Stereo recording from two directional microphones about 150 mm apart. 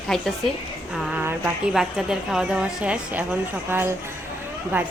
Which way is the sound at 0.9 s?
10° right (ahead or behind).